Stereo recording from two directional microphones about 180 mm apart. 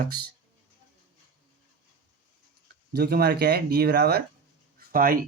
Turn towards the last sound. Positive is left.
turn(degrees=-55)  # may be behind; listen again after turning